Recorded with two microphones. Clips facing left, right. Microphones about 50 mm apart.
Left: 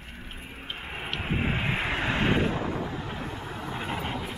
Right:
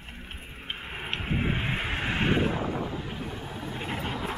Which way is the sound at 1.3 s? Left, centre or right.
Left.